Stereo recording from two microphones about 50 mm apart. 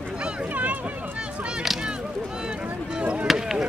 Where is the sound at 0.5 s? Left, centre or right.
Right.